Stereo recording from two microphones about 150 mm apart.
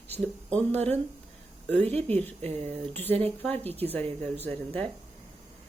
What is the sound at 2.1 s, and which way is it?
A woman's voice, 10° left (ahead or behind).